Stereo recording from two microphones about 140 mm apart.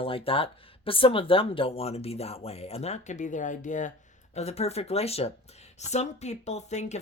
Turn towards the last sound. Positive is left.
turn(degrees=55)  # may be behind; listen again after turning